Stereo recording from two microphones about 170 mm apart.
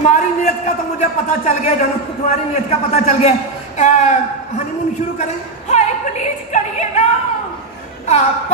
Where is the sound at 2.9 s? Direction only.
40° left (ahead or behind).